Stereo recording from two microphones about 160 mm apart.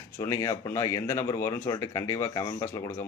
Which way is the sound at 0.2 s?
20° left (ahead or behind).